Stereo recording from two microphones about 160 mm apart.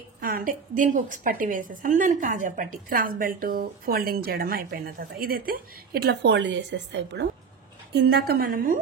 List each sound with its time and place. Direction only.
0.2 s a woman's voice: 65° right (ahead or behind)